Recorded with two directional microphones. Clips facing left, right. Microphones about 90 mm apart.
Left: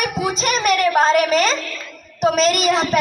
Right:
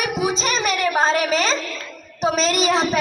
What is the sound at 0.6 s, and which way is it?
Speech, 20° right (ahead or behind).